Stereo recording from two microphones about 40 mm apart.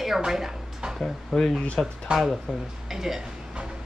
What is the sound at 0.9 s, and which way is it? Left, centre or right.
Speech, centre.